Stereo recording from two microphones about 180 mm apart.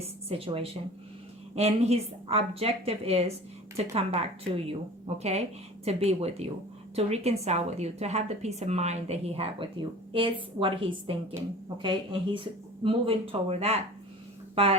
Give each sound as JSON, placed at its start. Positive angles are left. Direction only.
{"t": 0.3, "sound": "a woman's voice", "side_deg": -30}